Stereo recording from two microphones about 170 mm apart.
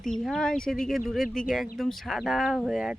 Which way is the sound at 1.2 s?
55° left (ahead or behind).